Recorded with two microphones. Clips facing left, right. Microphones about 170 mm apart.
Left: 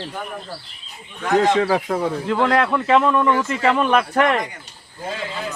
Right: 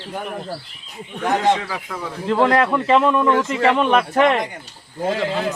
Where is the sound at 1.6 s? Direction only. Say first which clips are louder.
Left 9 dB; 40° left (ahead or behind).